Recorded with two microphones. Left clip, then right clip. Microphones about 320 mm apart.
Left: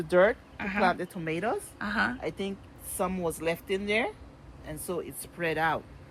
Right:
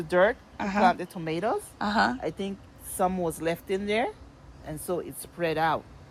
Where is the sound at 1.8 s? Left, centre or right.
Centre.